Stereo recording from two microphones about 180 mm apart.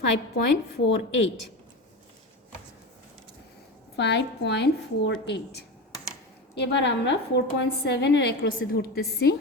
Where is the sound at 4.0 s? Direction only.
70° left (ahead or behind).